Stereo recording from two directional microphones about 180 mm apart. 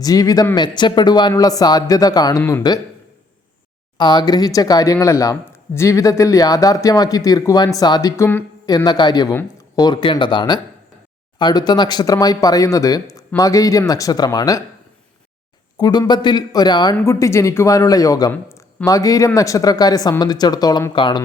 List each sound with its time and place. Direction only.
0.0 s speech: 20° left (ahead or behind)
2.4 s speech: 10° left (ahead or behind)
3.9 s speech: 25° left (ahead or behind)
15.8 s speech: 20° left (ahead or behind)